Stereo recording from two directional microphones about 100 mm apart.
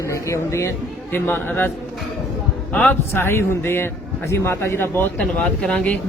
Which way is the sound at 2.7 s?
15° left (ahead or behind).